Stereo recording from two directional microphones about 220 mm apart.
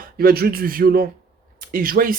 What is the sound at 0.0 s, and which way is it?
Speech, 45° right (ahead or behind).